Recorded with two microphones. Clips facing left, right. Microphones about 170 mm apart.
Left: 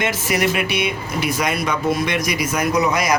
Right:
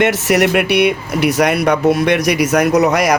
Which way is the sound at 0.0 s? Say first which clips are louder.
Right 7 dB; 70° right (ahead or behind).